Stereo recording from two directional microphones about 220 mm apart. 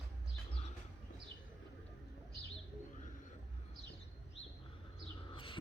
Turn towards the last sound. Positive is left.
turn(degrees=25)  # may be behind; listen again after turning